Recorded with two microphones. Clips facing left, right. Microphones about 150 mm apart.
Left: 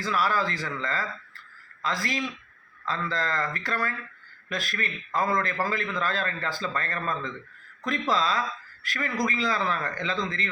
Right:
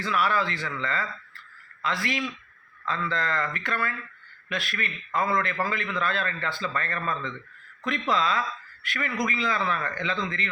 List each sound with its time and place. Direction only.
0.0 s a man's voice: 35° left (ahead or behind)
8.1 s a man's voice: 35° left (ahead or behind)